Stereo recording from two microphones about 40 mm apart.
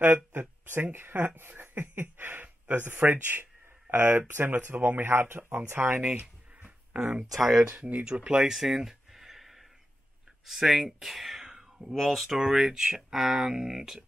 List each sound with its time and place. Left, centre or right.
0.0 s a sound: right
2.7 s speech: right
5.9 s speech: right
7.3 s speech: centre
7.8 s speech: right
8.2 s a sound: centre
10.4 s speech: centre
11.9 s speech: centre
12.5 s speech: centre